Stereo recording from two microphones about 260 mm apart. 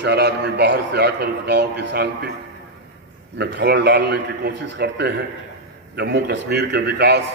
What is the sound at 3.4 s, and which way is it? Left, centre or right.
A man's voice, right.